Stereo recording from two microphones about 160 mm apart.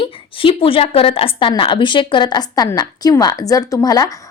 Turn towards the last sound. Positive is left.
turn(degrees=25)  # may be behind; listen again after turning